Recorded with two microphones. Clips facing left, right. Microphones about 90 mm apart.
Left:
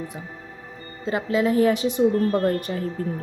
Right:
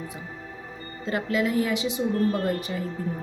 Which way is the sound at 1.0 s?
30° left (ahead or behind).